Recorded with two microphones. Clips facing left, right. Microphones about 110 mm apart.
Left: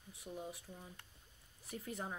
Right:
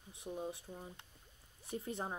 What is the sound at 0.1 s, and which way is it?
Speech, 25° right (ahead or behind).